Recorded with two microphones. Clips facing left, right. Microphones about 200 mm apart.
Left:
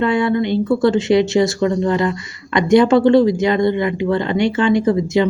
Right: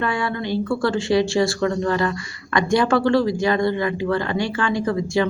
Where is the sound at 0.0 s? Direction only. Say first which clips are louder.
Left 8 dB; 20° left (ahead or behind).